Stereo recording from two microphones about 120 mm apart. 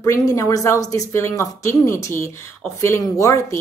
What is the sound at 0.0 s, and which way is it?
Speech, 30° left (ahead or behind).